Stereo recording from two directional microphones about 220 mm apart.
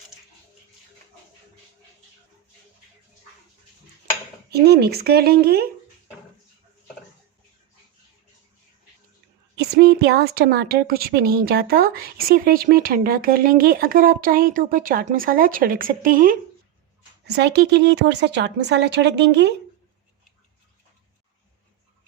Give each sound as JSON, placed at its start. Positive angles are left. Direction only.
{"t": 4.4, "sound": "a woman's voice", "side_deg": -45}
{"t": 9.6, "sound": "a woman's voice", "side_deg": -45}
{"t": 17.2, "sound": "a woman's voice", "side_deg": -50}